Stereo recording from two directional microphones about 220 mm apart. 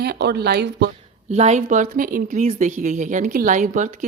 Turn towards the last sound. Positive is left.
turn(degrees=-35)  # may be behind; listen again after turning